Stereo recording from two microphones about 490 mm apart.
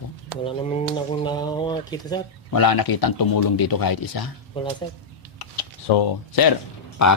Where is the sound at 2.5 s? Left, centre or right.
Left.